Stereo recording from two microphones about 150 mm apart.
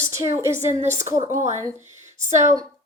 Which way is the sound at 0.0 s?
20° right (ahead or behind).